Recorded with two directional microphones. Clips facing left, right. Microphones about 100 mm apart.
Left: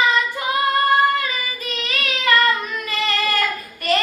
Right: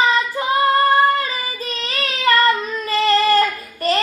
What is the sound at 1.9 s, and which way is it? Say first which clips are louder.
Child singing: right 2 dB; 35° right (ahead or behind).